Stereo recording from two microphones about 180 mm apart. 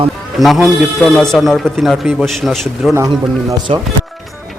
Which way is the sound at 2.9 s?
15° right (ahead or behind).